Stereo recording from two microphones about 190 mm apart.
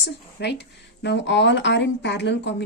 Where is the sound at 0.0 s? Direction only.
60° left (ahead or behind).